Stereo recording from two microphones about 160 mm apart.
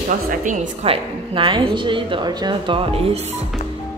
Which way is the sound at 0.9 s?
35° right (ahead or behind).